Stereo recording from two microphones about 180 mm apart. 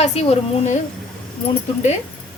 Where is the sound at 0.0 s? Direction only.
35° left (ahead or behind).